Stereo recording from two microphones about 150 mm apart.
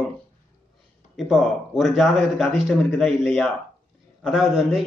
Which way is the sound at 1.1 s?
Centre (ahead or behind).